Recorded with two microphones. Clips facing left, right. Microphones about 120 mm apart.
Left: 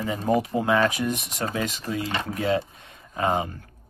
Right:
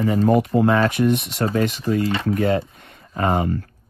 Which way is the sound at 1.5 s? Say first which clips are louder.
Right 9 dB; 50° right (ahead or behind).